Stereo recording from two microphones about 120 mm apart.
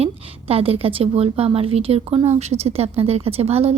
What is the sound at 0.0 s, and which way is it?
A woman's voice, 55° right (ahead or behind).